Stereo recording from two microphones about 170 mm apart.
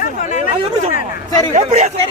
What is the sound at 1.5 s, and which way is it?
Speech, 45° right (ahead or behind).